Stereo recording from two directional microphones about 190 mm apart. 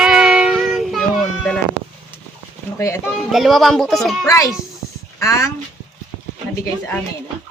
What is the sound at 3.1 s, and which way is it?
Speech, centre (ahead or behind).